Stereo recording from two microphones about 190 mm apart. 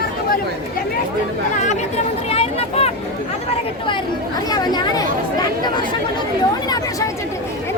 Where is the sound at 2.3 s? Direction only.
30° left (ahead or behind).